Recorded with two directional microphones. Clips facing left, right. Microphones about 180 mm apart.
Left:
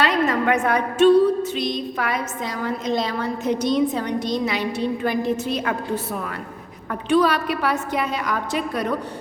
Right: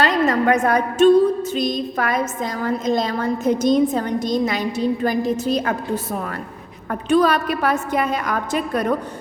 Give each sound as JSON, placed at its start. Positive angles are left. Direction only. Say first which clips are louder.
{"t": 0.0, "sound": "a woman's voice", "louder": "right 2 dB", "side_deg": -40}
{"t": 7.1, "sound": "a woman's voice", "louder": "right 2 dB", "side_deg": -45}